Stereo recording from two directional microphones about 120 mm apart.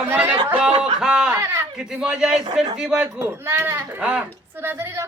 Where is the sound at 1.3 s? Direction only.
25° right (ahead or behind).